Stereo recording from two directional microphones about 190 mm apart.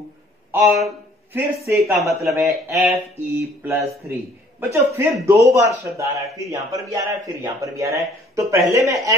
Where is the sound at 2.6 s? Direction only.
15° right (ahead or behind).